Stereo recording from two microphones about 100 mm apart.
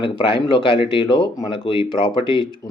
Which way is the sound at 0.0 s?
60° left (ahead or behind).